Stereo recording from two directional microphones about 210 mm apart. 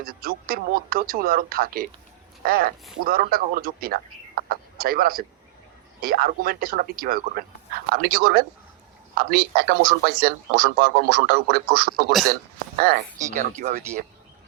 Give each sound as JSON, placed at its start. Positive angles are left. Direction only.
{"t": 0.0, "sound": "a man's voice", "side_deg": -45}
{"t": 13.6, "sound": "speech", "side_deg": -35}